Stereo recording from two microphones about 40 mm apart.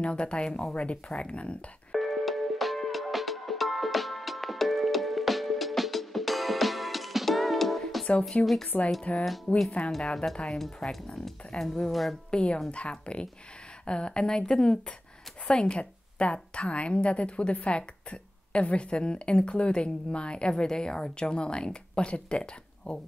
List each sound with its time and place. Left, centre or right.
0.0 s a woman's voice: left
1.9 s music: centre
8.3 s a woman's voice: left
9.8 s speech: centre
12.3 s a woman's voice: left
15.8 s a woman's voice: left